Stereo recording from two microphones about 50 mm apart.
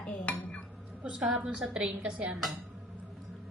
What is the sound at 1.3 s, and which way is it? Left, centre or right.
A woman's voice, centre.